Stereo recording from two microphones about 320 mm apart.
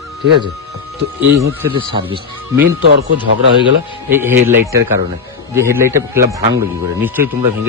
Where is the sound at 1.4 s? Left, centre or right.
Centre.